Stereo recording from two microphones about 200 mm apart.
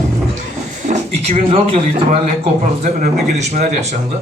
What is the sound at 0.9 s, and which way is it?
A man's voice, 30° right (ahead or behind).